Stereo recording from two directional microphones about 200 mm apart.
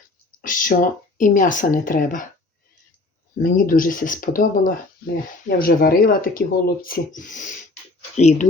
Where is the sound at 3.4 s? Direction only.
45° left (ahead or behind).